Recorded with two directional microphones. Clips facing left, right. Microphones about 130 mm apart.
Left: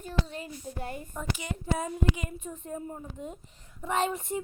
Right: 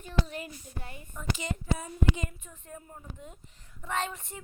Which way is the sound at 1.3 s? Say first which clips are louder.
Even; 15° left (ahead or behind).